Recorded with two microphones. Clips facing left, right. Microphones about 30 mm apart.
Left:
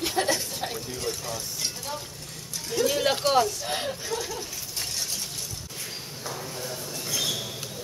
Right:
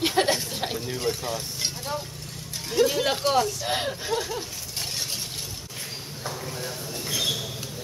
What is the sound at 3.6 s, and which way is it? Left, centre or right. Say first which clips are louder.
Speech: right 3 dB; right.